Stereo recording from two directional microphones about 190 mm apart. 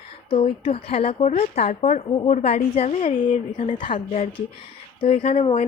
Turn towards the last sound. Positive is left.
turn(degrees=30)  # may be behind; listen again after turning